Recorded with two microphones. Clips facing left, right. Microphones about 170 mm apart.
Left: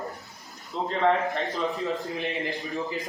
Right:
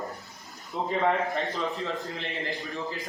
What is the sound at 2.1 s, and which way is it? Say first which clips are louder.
Speech: left 5 dB; 20° left (ahead or behind).